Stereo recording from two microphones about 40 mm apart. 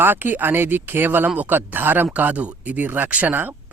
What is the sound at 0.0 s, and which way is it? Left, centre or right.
Speech, right.